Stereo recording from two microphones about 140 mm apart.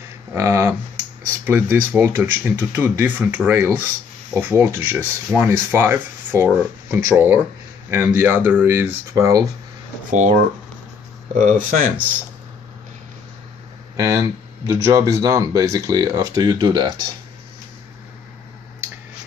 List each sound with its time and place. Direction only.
0.3 s a sound: 20° right (ahead or behind)
1.4 s speech: 15° right (ahead or behind)
11.3 s speech: 75° right (ahead or behind)
13.9 s speech: 25° right (ahead or behind)